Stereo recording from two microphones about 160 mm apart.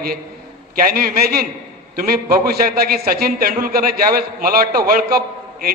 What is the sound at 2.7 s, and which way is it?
A man's voice, 70° right (ahead or behind).